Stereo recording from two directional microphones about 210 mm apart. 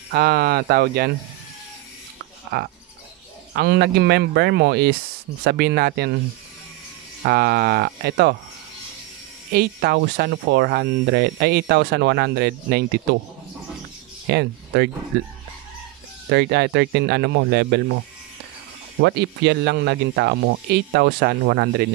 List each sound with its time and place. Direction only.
0.1 s speech: 45° right (ahead or behind)
2.5 s speech: 50° right (ahead or behind)
7.2 s speech: 50° right (ahead or behind)
9.5 s speech: 50° right (ahead or behind)
14.3 s speech: 55° right (ahead or behind)
18.9 s speech: 55° right (ahead or behind)